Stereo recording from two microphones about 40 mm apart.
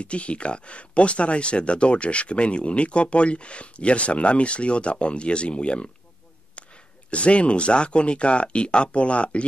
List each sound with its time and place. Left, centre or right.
0.0 s speech: left
7.1 s speech: left